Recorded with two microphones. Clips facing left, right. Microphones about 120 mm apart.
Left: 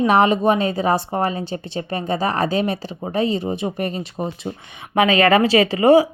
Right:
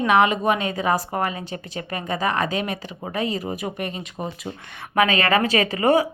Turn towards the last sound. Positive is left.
turn(degrees=30)  # may be behind; listen again after turning